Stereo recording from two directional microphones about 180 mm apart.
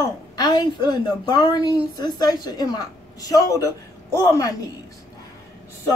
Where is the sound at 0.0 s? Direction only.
25° left (ahead or behind).